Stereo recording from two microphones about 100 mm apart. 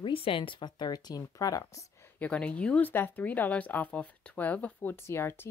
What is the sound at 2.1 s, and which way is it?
Speech, 15° left (ahead or behind).